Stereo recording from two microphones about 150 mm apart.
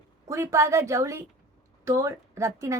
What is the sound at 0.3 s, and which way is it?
A woman's voice, 20° right (ahead or behind).